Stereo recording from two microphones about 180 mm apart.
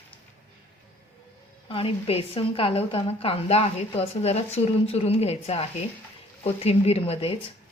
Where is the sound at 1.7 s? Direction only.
30° left (ahead or behind).